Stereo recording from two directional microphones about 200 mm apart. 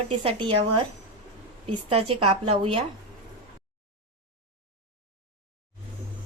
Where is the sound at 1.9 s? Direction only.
25° right (ahead or behind).